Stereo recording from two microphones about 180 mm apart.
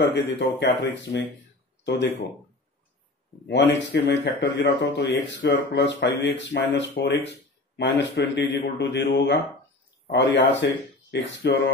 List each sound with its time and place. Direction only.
0.0 s speech: 65° left (ahead or behind)
3.4 s speech: 75° left (ahead or behind)